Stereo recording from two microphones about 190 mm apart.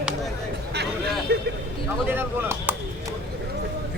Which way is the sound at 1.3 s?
55° right (ahead or behind).